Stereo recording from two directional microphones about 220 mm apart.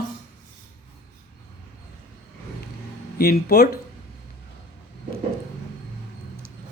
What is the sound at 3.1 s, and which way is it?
Speech, 45° left (ahead or behind).